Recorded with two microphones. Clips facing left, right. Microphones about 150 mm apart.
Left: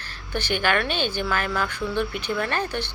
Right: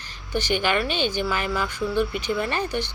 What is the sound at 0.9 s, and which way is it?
Speech, 50° left (ahead or behind).